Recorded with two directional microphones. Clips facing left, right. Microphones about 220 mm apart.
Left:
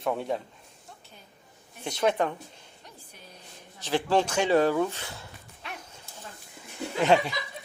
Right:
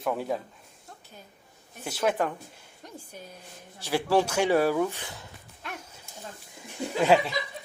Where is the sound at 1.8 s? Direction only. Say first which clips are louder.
Left 1 dB; 5° right (ahead or behind).